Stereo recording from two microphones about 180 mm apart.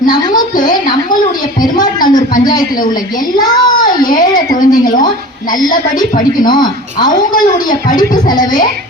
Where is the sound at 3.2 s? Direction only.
25° left (ahead or behind).